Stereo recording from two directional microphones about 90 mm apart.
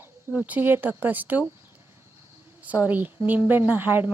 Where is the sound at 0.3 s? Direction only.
15° right (ahead or behind).